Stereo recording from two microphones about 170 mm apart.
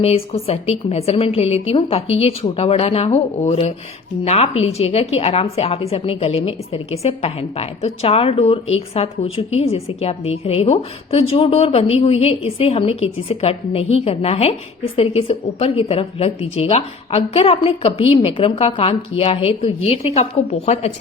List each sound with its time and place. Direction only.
0.0 s a woman's voice: 35° left (ahead or behind)